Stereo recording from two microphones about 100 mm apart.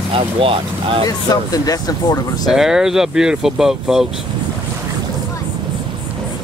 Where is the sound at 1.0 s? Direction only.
40° left (ahead or behind).